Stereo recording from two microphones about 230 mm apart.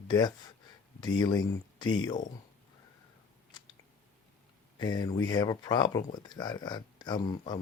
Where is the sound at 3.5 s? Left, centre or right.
Centre.